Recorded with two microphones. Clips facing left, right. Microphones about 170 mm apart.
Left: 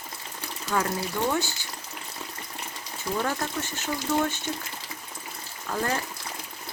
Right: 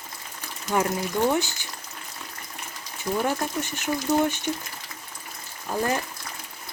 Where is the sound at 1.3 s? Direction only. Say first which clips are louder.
Right 3 dB; 20° right (ahead or behind).